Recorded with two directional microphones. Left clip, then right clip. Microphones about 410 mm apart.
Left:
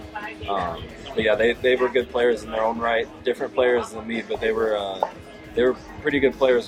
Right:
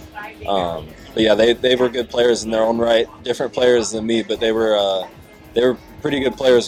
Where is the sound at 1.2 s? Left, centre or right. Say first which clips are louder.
Right 6 dB; right.